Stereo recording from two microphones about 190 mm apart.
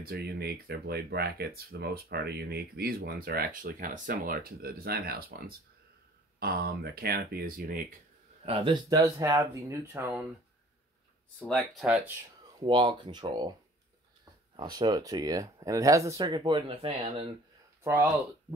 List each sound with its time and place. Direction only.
0.0 s speech: 55° right (ahead or behind)
6.4 s speech: 55° right (ahead or behind)
8.5 s speech: 25° right (ahead or behind); by 10.2 s 10° right (ahead or behind)
11.3 s speech: centre (ahead or behind)
12.5 s speech: 25° right (ahead or behind)
14.6 s speech: 20° right (ahead or behind)